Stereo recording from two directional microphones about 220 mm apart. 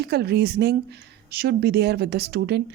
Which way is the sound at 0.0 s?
50° right (ahead or behind).